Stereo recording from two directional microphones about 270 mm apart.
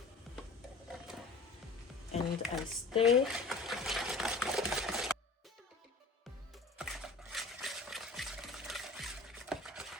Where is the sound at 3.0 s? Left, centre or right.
Centre.